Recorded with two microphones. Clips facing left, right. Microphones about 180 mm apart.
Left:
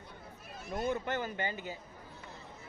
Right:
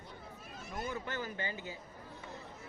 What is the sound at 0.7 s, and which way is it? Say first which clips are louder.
Speech: left 6 dB; 20° left (ahead or behind).